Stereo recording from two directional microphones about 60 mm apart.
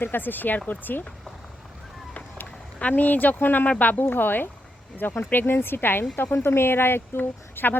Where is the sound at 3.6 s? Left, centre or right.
Left.